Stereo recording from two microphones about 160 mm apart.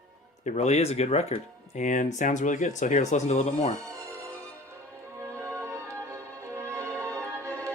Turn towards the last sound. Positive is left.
turn(degrees=-15)  # may be behind; listen again after turning